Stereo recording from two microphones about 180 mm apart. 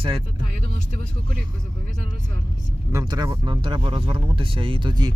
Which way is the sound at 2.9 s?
20° right (ahead or behind).